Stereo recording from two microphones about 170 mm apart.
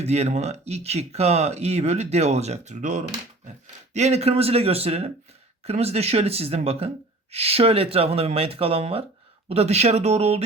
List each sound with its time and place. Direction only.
0.0 s speech: 40° right (ahead or behind)